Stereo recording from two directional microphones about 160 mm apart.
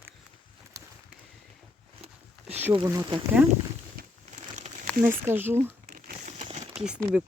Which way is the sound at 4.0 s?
65° right (ahead or behind).